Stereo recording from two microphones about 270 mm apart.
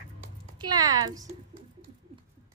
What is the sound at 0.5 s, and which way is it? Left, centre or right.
Speech, centre.